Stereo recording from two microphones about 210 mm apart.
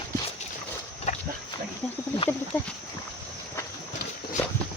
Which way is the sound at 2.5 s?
10° left (ahead or behind).